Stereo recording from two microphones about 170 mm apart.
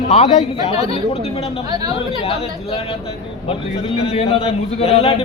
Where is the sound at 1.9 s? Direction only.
35° left (ahead or behind).